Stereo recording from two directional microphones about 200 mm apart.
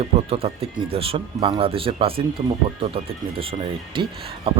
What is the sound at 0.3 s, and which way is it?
Speech, 30° right (ahead or behind).